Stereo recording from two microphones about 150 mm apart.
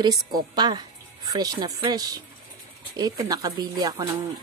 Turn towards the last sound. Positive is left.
turn(degrees=-25)  # may be behind; listen again after turning